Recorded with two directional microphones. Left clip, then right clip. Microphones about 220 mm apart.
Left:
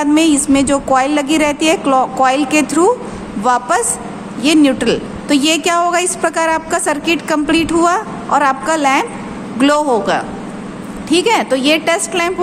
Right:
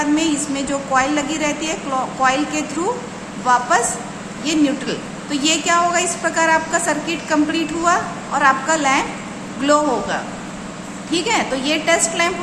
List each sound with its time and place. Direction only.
0.0 s a woman's voice: 50° left (ahead or behind)